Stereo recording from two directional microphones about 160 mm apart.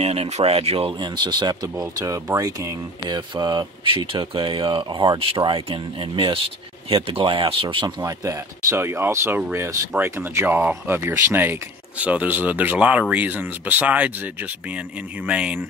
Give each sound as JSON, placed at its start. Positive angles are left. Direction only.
{"t": 0.0, "sound": "speech", "side_deg": -40}